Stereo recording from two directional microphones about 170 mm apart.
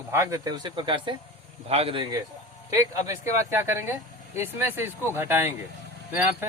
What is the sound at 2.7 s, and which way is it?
Speech, 20° right (ahead or behind).